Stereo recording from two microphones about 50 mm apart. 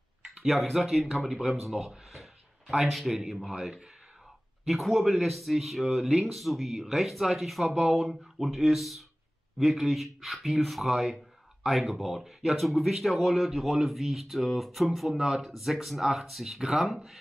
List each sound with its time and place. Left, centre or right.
0.2 s speech: centre